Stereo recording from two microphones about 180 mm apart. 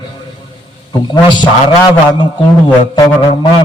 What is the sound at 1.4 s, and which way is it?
A man's voice, 25° left (ahead or behind).